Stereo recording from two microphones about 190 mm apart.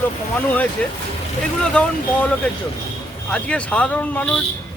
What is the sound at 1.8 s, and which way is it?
Speech, 5° left (ahead or behind).